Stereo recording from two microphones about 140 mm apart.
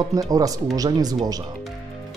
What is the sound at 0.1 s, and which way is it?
Speech, 25° right (ahead or behind).